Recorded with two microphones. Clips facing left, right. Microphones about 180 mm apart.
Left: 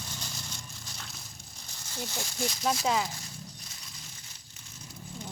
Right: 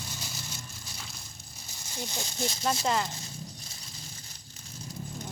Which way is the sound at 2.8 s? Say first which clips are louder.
Even; 5° left (ahead or behind).